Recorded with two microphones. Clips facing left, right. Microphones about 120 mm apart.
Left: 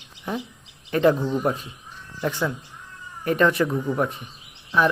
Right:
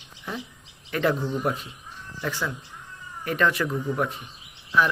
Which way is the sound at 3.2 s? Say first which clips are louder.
Left 4 dB; 25° left (ahead or behind).